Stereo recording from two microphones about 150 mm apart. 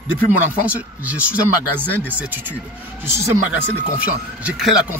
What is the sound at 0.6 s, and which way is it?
A man's voice, 10° right (ahead or behind).